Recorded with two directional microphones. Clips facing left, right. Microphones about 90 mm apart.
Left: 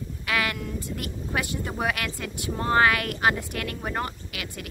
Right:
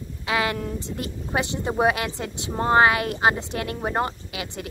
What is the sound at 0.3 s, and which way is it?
Speech, 25° right (ahead or behind).